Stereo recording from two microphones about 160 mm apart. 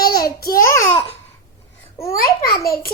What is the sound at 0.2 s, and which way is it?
Babbling, 70° left (ahead or behind).